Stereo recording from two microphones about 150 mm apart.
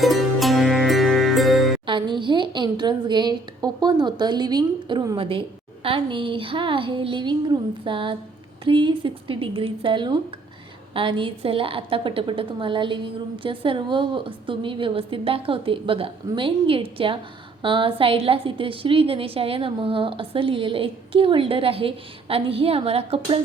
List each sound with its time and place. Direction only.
0.0 s music: centre (ahead or behind)
1.9 s a woman's voice: 35° right (ahead or behind)